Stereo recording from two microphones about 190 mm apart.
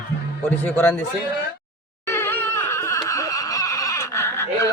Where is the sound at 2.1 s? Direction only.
10° left (ahead or behind).